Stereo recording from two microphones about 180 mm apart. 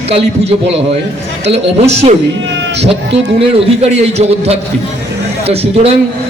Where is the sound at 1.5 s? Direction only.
35° right (ahead or behind).